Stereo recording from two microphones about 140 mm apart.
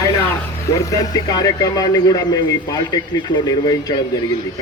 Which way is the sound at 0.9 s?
25° left (ahead or behind).